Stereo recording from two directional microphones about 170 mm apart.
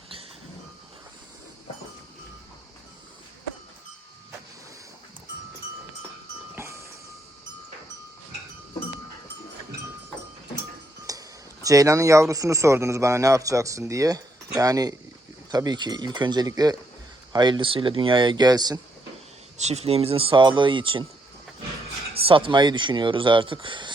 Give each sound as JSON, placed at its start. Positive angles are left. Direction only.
{"t": 11.1, "sound": "music", "side_deg": -20}
{"t": 11.6, "sound": "speech", "side_deg": -20}
{"t": 19.5, "sound": "speech", "side_deg": -40}
{"t": 22.1, "sound": "speech", "side_deg": -35}